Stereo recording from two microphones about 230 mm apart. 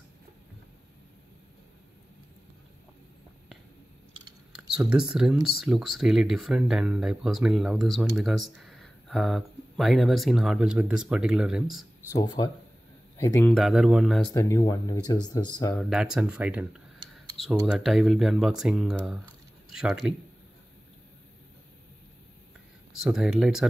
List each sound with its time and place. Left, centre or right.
4.5 s speech: centre
12.1 s speech: centre
13.5 s speech: centre
14.3 s speech: centre
15.7 s speech: centre
22.9 s speech: centre